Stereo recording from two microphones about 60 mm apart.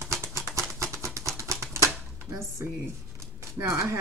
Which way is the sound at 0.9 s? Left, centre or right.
Right.